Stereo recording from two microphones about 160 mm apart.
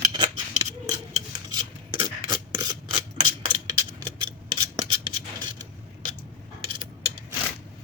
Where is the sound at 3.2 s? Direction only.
30° right (ahead or behind).